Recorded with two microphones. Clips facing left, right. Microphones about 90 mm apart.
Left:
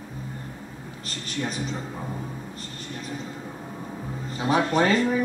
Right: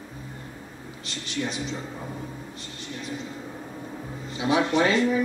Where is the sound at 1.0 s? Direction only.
45° left (ahead or behind).